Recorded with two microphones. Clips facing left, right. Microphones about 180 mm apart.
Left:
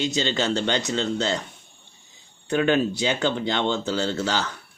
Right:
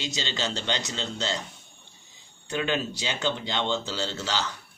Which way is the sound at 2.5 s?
55° left (ahead or behind).